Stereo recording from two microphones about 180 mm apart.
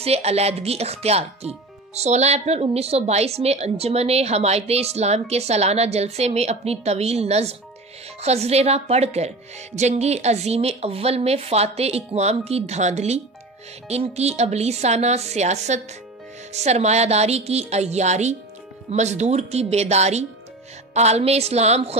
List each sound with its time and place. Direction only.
0.0 s a woman's voice: 35° right (ahead or behind)